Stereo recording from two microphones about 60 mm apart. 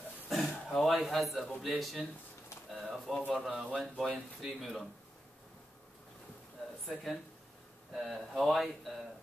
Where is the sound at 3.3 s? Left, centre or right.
Centre.